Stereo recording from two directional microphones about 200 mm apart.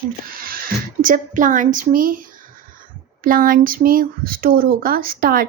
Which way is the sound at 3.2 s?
45° right (ahead or behind).